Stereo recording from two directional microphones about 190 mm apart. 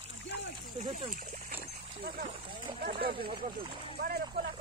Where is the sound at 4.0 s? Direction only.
50° right (ahead or behind).